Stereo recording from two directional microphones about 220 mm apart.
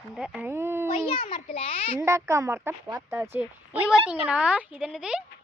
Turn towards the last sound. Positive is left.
turn(degrees=-5)  # may be behind; listen again after turning